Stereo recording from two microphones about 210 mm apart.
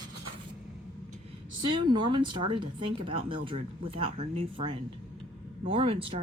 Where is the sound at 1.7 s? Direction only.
20° right (ahead or behind).